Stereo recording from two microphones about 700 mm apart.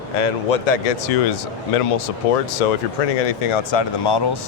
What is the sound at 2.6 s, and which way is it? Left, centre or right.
Speech, left.